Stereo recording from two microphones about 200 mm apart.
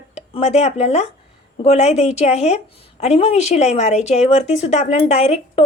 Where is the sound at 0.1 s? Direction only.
35° left (ahead or behind).